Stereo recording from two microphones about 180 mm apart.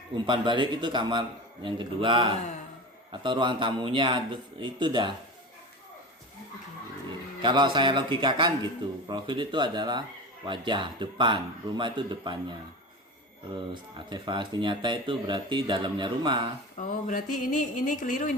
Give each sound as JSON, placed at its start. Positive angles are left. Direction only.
{"t": 0.1, "sound": "speech", "side_deg": -25}
{"t": 7.4, "sound": "speech", "side_deg": -25}
{"t": 14.1, "sound": "speech", "side_deg": -25}
{"t": 16.7, "sound": "speech", "side_deg": 45}